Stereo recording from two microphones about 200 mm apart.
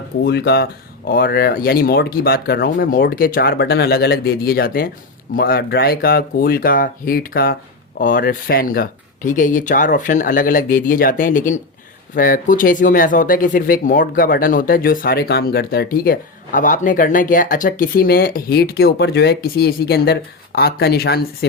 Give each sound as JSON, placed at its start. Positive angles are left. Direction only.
{"t": 0.3, "sound": "speech", "side_deg": 55}